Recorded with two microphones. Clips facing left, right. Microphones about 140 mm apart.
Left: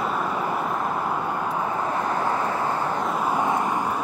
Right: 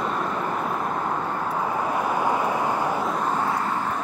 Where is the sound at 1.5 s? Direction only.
10° right (ahead or behind).